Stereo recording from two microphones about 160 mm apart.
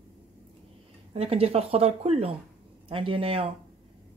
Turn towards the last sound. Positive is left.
turn(degrees=-35)  # may be behind; listen again after turning